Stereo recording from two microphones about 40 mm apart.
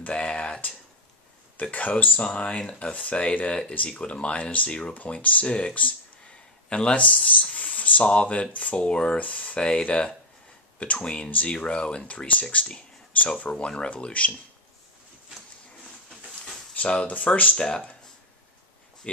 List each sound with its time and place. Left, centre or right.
0.0 s speech: left
2.2 s speech: left
2.9 s speech: left
5.5 s speech: left
7.5 s a sound: left
8.0 s speech: left
16.7 s speech: left